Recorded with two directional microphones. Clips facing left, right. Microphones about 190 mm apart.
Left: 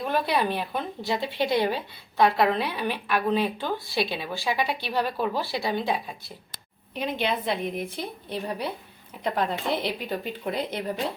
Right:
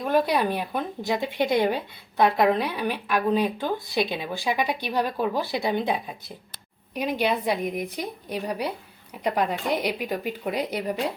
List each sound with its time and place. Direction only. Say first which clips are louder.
0.3 s speech: right 1 dB; 10° right (ahead or behind)